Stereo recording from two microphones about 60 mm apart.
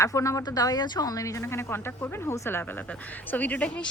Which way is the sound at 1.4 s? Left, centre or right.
Left.